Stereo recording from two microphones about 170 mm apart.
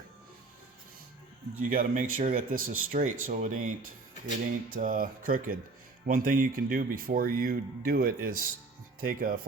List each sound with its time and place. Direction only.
1.7 s speech: 55° right (ahead or behind)
4.7 s speech: 55° right (ahead or behind)